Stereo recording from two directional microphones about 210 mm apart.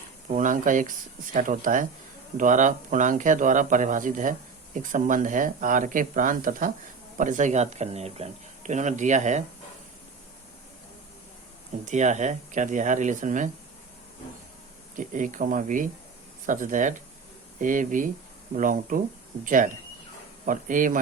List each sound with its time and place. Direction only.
0.3 s speech: 40° right (ahead or behind)
11.9 s speech: 35° right (ahead or behind)
14.9 s speech: 40° right (ahead or behind)